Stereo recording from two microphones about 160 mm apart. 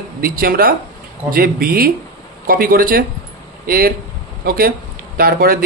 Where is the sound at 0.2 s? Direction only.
65° right (ahead or behind).